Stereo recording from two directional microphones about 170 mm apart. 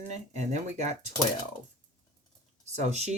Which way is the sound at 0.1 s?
45° right (ahead or behind).